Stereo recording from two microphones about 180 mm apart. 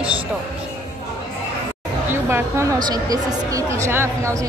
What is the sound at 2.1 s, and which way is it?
A woman's voice, 15° right (ahead or behind).